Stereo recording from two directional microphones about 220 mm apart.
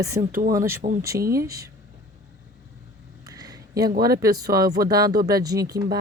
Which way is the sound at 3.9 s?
45° right (ahead or behind).